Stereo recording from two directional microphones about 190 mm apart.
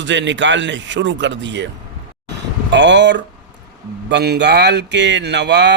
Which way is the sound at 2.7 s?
70° right (ahead or behind).